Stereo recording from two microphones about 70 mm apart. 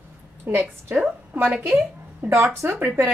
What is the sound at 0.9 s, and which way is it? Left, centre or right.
Speech, centre.